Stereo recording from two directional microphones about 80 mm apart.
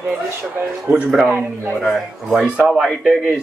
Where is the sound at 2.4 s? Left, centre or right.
Centre.